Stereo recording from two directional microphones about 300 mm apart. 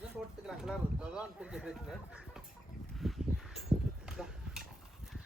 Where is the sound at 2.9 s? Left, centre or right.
Centre.